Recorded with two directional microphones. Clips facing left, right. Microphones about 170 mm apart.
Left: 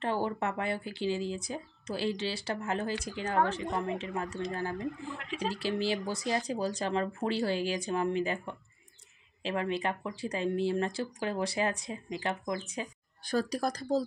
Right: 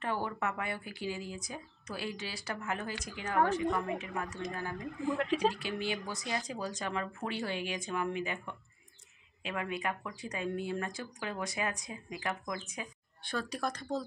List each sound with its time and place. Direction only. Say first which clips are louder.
0.0 s speech: left 4 dB; 30° left (ahead or behind)
5.1 s speech: right 8 dB; 40° right (ahead or behind)
5.5 s speech: left 5 dB; 35° left (ahead or behind)